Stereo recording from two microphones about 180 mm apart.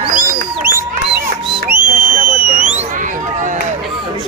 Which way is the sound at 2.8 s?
45° right (ahead or behind).